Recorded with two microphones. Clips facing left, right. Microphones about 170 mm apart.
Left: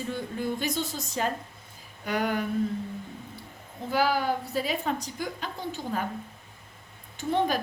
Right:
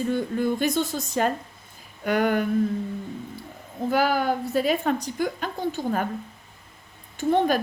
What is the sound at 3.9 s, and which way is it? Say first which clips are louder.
Speech: right 3 dB; 55° right (ahead or behind).